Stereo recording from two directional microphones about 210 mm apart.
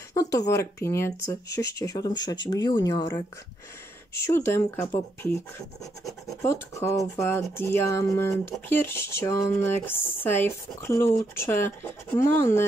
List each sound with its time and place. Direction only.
0.1 s speech: 15° left (ahead or behind)
4.1 s speech: 10° left (ahead or behind)
6.4 s speech: 15° left (ahead or behind)